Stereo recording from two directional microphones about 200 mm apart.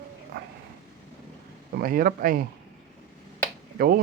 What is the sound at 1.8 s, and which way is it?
Speech, 45° right (ahead or behind).